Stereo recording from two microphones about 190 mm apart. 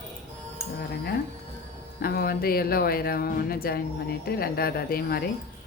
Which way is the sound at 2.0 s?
55° left (ahead or behind).